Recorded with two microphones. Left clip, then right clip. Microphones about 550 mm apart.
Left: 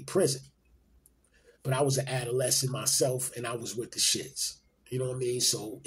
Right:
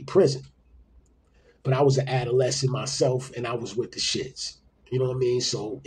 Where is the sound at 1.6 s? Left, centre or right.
Left.